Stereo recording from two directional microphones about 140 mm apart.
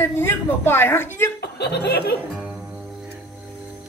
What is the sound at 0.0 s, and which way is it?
A woman's voice, 15° left (ahead or behind).